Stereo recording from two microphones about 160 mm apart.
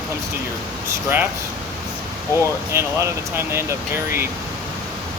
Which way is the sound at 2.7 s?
15° right (ahead or behind).